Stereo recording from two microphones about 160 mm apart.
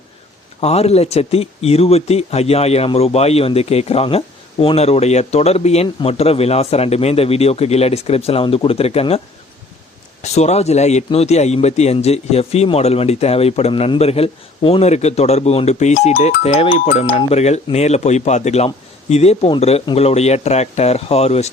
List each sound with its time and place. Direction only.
0.6 s speech: 40° left (ahead or behind)